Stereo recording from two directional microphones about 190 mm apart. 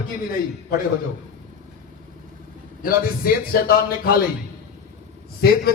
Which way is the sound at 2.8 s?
50° left (ahead or behind).